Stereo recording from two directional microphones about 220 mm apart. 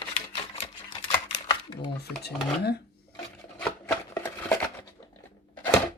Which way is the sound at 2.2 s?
45° left (ahead or behind).